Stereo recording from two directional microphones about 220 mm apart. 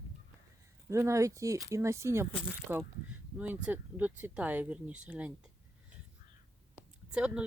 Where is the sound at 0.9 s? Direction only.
15° right (ahead or behind).